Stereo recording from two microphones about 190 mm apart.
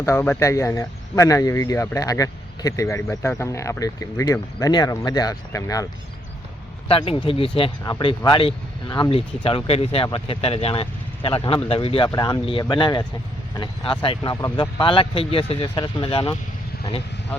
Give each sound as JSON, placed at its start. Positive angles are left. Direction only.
{"t": 0.0, "sound": "speech", "side_deg": 15}
{"t": 6.8, "sound": "speech", "side_deg": 30}